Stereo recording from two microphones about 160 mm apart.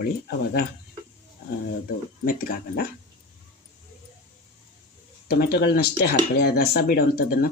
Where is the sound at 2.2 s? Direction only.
65° left (ahead or behind).